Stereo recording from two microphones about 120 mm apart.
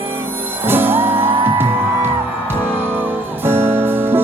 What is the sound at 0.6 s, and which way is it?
Music, 20° right (ahead or behind).